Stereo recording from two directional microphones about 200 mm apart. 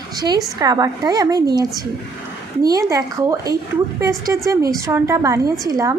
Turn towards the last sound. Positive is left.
turn(degrees=-15)  # may be behind; listen again after turning